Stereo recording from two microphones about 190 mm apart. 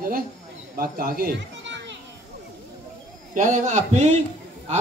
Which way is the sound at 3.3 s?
40° right (ahead or behind).